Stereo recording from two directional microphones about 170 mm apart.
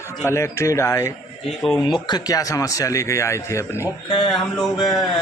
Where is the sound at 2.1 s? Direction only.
25° left (ahead or behind).